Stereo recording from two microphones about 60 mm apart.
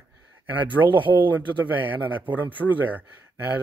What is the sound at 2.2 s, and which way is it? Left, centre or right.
Speech, right.